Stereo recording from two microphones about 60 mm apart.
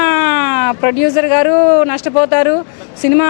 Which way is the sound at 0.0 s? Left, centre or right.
Centre.